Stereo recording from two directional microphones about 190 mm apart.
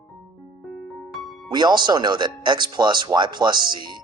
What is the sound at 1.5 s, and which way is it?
Speech, 25° right (ahead or behind).